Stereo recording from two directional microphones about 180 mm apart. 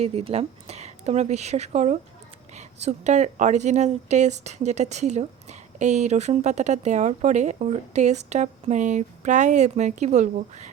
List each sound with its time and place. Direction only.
0.0 s speech: 35° right (ahead or behind)